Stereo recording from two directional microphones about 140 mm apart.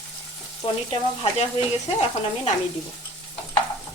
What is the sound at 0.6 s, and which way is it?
Speech, 45° left (ahead or behind).